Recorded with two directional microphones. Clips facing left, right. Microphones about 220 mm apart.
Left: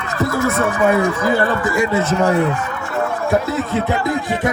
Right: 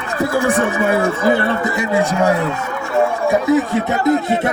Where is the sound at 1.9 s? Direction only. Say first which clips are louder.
Right 3 dB; 10° right (ahead or behind).